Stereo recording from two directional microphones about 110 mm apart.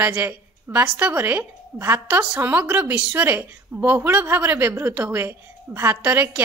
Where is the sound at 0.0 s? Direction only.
15° right (ahead or behind).